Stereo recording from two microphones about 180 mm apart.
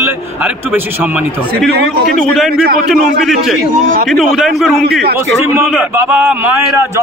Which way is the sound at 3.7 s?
50° right (ahead or behind).